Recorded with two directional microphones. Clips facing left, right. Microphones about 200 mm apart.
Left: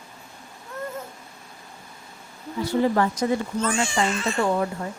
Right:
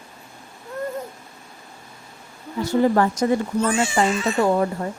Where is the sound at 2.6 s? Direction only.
45° right (ahead or behind).